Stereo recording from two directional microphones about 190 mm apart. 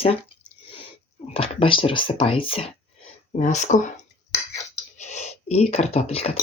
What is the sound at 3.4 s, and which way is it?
Speech, 40° left (ahead or behind).